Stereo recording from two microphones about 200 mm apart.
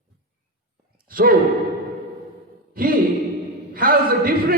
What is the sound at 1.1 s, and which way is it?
Speech, 45° right (ahead or behind).